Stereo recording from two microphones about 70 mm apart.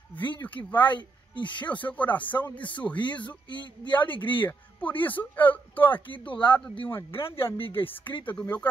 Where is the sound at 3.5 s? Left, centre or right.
Left.